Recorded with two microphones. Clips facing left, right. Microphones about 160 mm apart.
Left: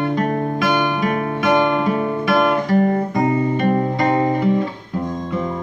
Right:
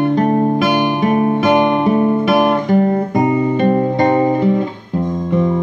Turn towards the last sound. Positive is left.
turn(degrees=-25)  # may be behind; listen again after turning